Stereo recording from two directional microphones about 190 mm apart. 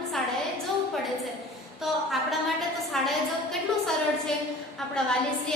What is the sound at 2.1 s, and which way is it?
Speech, centre (ahead or behind).